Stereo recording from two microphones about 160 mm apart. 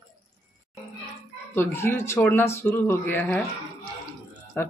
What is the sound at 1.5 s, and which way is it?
Speech, 15° left (ahead or behind).